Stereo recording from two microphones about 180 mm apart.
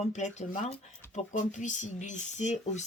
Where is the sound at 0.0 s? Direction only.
40° left (ahead or behind).